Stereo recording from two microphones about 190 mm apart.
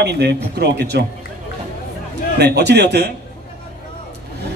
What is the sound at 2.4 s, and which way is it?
Speech, 60° right (ahead or behind).